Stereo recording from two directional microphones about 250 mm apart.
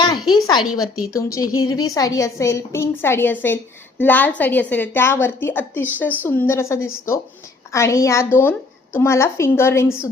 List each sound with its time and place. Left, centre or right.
0.3 s a woman's voice: centre